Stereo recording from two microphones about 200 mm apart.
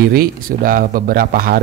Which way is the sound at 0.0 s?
50° right (ahead or behind).